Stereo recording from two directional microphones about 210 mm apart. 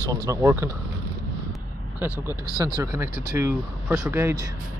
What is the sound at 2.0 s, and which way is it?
Speech, 15° right (ahead or behind).